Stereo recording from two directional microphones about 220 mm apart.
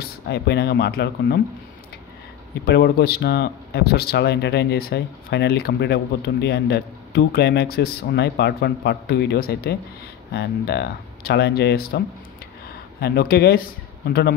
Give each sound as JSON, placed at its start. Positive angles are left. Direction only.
{"t": 0.0, "sound": "speech", "side_deg": 50}
{"t": 2.6, "sound": "speech", "side_deg": 45}